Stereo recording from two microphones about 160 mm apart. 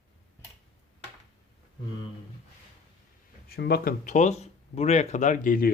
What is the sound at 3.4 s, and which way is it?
Speech, 75° left (ahead or behind).